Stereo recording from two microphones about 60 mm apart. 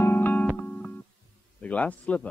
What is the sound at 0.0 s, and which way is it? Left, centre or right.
Music, left.